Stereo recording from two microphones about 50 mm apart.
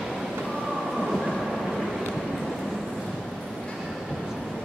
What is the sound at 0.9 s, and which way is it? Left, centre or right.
Train, centre.